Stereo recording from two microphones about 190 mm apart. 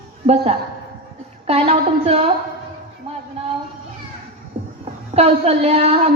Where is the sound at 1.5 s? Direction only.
30° right (ahead or behind).